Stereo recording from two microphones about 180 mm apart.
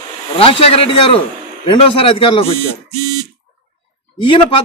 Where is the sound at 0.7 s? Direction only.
30° left (ahead or behind).